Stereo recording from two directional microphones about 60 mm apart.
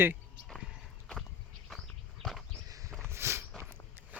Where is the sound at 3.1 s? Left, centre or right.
Right.